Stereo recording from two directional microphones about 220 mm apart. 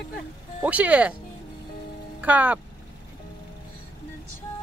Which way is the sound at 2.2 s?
5° right (ahead or behind).